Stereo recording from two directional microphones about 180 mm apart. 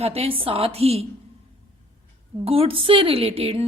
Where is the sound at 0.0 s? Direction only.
35° right (ahead or behind).